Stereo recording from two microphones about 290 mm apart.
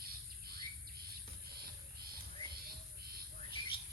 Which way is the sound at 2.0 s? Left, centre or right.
Right.